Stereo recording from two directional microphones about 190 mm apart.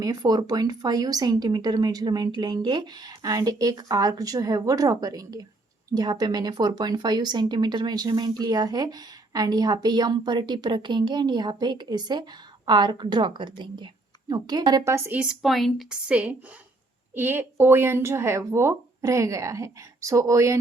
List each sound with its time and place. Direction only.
0.0 s a woman's voice: 20° right (ahead or behind)